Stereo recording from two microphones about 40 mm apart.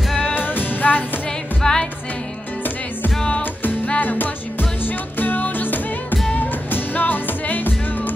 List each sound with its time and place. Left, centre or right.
0.2 s music: left
1.6 s music: centre
3.6 s music: left